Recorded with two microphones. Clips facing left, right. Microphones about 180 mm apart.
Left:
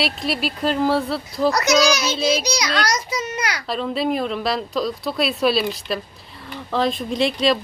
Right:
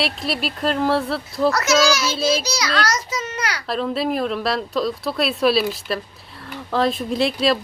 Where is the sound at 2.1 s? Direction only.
Centre (ahead or behind).